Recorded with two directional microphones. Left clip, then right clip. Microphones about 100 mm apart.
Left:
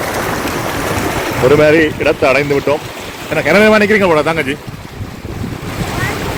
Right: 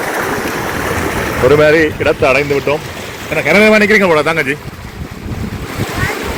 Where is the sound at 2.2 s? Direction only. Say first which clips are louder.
Even; 5° left (ahead or behind).